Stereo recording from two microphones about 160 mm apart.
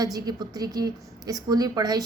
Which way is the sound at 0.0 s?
25° right (ahead or behind).